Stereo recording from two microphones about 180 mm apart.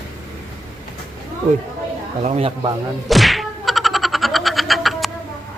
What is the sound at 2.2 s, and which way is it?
Speech, 35° right (ahead or behind).